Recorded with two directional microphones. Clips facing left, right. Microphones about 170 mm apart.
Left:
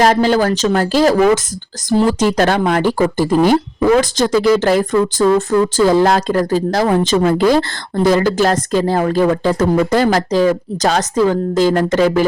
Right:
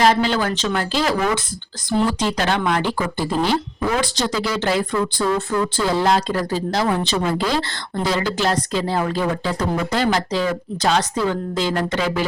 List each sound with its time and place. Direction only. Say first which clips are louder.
0.0 s speech: left 5 dB; 45° left (ahead or behind)